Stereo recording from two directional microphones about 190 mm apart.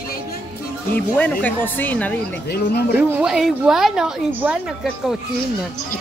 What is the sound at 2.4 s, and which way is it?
Speech, 55° left (ahead or behind).